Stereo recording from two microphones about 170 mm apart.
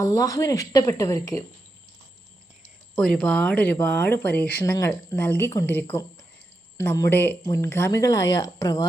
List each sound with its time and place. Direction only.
0.0 s a woman's voice: 20° left (ahead or behind)
2.9 s speech: 5° left (ahead or behind)
6.8 s speech: 15° left (ahead or behind)